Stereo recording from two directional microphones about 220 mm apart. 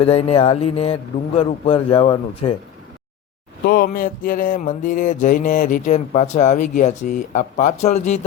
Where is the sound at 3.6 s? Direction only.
40° left (ahead or behind).